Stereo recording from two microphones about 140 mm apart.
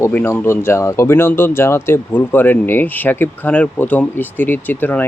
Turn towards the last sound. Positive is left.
turn(degrees=15)  # may be behind; listen again after turning